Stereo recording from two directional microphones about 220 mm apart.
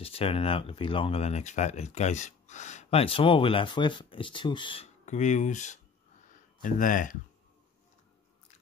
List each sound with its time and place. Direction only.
0.0 s speech: 25° left (ahead or behind)